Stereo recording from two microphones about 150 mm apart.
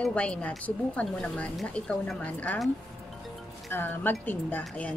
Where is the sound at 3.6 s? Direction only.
15° left (ahead or behind).